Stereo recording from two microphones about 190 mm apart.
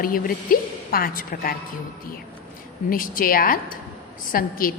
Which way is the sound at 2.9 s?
50° left (ahead or behind).